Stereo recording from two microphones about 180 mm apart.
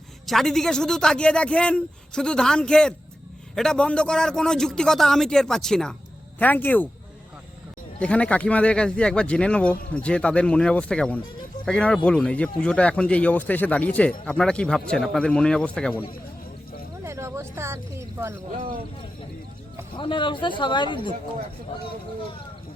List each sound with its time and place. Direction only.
0.3 s speech: centre (ahead or behind)
7.9 s speech: 5° left (ahead or behind)
17.0 s a sound: 15° right (ahead or behind)
20.0 s speech: 25° left (ahead or behind)